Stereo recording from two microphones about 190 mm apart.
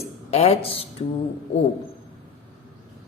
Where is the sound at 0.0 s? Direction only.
35° left (ahead or behind).